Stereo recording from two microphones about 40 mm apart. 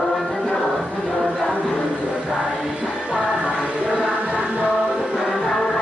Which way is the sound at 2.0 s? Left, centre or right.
Right.